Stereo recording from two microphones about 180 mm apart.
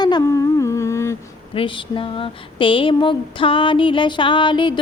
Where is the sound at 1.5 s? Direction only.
30° left (ahead or behind).